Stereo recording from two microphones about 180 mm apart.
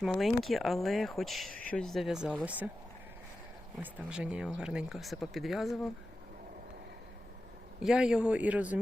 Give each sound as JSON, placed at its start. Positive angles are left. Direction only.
{"t": 0.0, "sound": "speech", "side_deg": 0}
{"t": 3.9, "sound": "speech", "side_deg": -5}
{"t": 7.8, "sound": "speech", "side_deg": -5}